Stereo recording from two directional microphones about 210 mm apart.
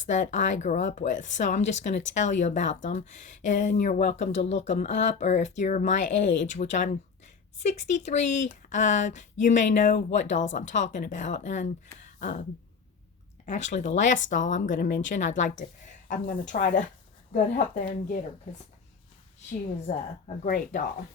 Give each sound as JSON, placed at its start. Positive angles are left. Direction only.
{"t": 0.0, "sound": "speech", "side_deg": 35}
{"t": 13.4, "sound": "speech", "side_deg": 35}
{"t": 14.8, "sound": "speech", "side_deg": 55}
{"t": 15.1, "sound": "speech", "side_deg": 35}
{"t": 19.9, "sound": "speech", "side_deg": 40}